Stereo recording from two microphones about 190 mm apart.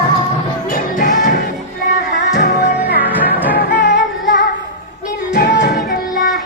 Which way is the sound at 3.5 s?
60° left (ahead or behind).